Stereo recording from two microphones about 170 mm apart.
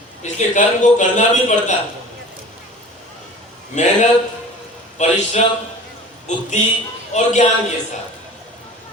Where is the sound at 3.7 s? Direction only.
45° left (ahead or behind).